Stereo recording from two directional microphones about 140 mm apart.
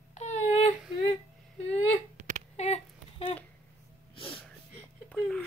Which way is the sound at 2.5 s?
50° left (ahead or behind).